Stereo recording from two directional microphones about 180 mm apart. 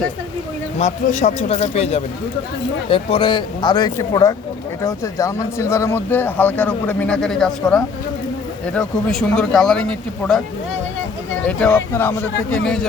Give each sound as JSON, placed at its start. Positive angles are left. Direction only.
{"t": 0.8, "sound": "a man's voice", "side_deg": 45}
{"t": 11.4, "sound": "speech", "side_deg": 5}